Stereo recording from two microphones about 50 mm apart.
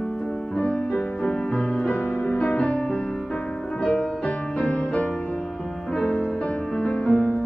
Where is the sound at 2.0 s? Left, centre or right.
Left.